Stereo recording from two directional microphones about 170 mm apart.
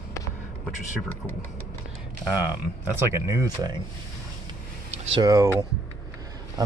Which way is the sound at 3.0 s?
15° right (ahead or behind).